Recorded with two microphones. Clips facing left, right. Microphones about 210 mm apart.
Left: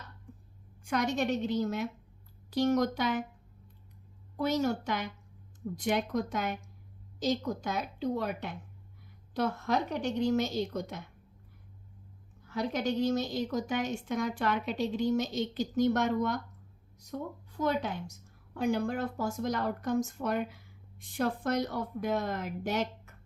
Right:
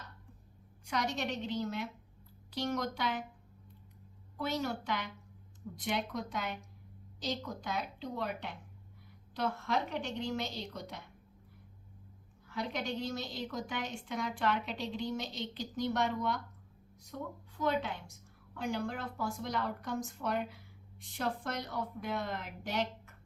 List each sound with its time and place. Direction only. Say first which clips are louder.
0.9 s a woman's voice: left 6 dB; 50° left (ahead or behind)
4.4 s a woman's voice: left 6 dB; 45° left (ahead or behind)
12.5 s a woman's voice: left 6 dB; 45° left (ahead or behind)